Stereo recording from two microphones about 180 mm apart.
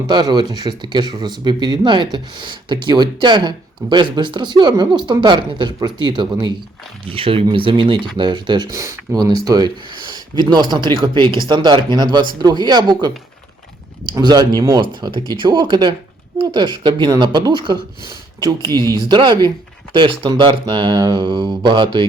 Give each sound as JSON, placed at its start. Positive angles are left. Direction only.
{"t": 0.1, "sound": "speech", "side_deg": -25}